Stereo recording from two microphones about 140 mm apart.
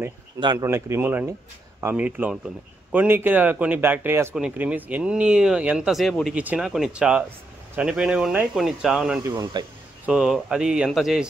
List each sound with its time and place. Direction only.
0.4 s speech: 30° right (ahead or behind)
0.7 s speech: 20° right (ahead or behind); by 9.2 s 5° right (ahead or behind)
9.3 s speech: 30° right (ahead or behind)
10.0 s speech: 5° right (ahead or behind)